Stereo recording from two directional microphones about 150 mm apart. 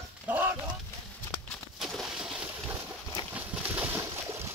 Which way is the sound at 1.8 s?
Centre (ahead or behind).